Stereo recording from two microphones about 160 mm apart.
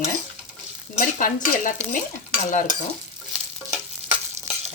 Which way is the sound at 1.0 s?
55° left (ahead or behind).